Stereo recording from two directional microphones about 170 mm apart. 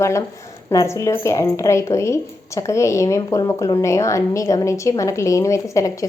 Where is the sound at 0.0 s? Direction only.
15° left (ahead or behind).